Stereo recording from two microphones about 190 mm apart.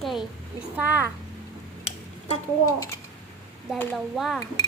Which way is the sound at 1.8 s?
30° left (ahead or behind).